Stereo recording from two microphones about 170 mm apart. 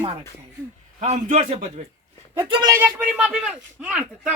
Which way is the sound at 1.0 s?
45° right (ahead or behind).